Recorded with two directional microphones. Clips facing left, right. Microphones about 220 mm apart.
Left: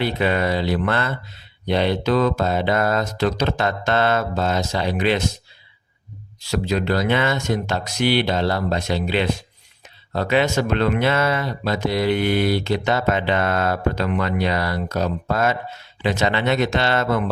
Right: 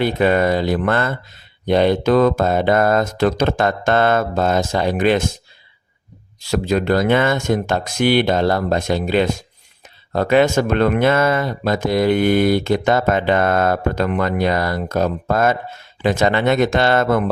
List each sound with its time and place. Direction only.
0.0 s speech: 50° right (ahead or behind)
6.5 s speech: 50° right (ahead or behind)